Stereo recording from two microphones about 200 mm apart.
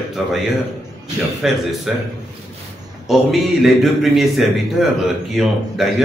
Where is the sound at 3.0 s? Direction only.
Centre (ahead or behind).